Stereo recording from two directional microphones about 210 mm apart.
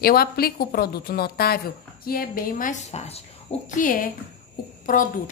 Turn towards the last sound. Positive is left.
turn(degrees=40)  # may be behind; listen again after turning